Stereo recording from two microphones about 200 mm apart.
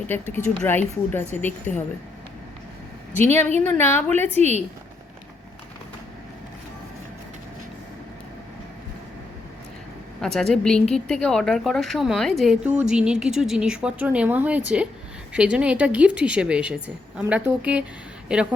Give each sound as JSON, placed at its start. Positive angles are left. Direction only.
{"t": 0.1, "sound": "a woman's voice", "side_deg": 10}
{"t": 3.2, "sound": "a woman's voice", "side_deg": 10}
{"t": 4.4, "sound": "a woman's voice", "side_deg": -35}
{"t": 10.2, "sound": "a woman's voice", "side_deg": 0}